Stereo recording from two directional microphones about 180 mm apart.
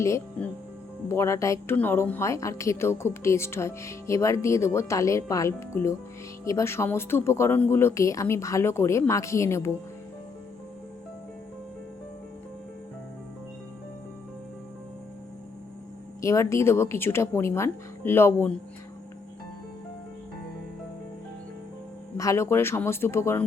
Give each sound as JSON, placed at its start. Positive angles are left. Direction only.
{"t": 0.0, "sound": "a woman's voice", "side_deg": 10}
{"t": 16.2, "sound": "a woman's voice", "side_deg": 15}
{"t": 22.2, "sound": "a woman's voice", "side_deg": 15}